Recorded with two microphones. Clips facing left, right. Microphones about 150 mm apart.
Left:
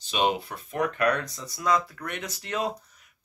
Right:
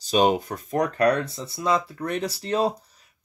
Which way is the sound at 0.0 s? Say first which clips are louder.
Right 6 dB; 40° right (ahead or behind).